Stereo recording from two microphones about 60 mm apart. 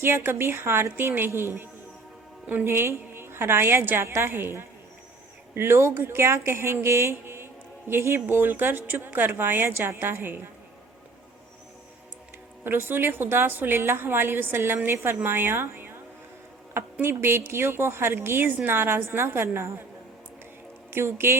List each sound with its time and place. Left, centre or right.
0.0 s speech: right
2.6 s speech: right
12.6 s speech: right
20.9 s speech: right